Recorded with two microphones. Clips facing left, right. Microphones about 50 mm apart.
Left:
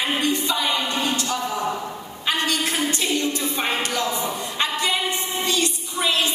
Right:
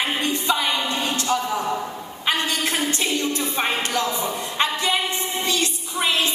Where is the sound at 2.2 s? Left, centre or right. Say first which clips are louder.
Even; right.